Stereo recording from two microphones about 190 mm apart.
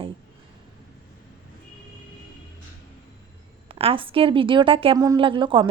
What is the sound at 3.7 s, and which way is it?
A woman's voice, 30° right (ahead or behind).